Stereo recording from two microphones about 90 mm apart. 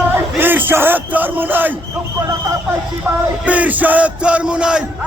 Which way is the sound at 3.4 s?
15° right (ahead or behind).